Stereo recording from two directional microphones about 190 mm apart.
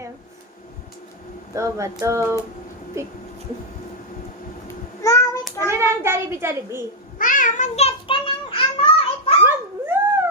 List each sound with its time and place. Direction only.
1.5 s a child's voice: 15° right (ahead or behind)
5.0 s child singing: 15° left (ahead or behind)
5.6 s a child's voice: 15° right (ahead or behind)
7.2 s child singing: 45° left (ahead or behind); by 9.3 s 30° left (ahead or behind)
9.4 s dog: 10° right (ahead or behind)